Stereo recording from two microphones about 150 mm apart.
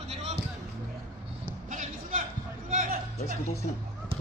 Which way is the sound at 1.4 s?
60° right (ahead or behind).